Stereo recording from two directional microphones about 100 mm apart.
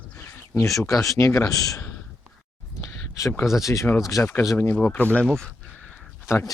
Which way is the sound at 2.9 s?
30° left (ahead or behind).